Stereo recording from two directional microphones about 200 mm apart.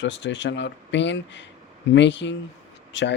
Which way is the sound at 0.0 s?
65° left (ahead or behind).